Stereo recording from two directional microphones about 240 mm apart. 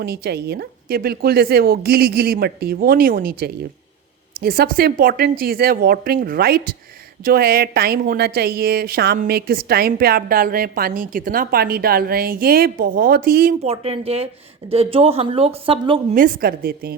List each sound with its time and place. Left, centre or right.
0.0 s a woman's voice: right
13.7 s speech: right
16.1 s a woman's voice: right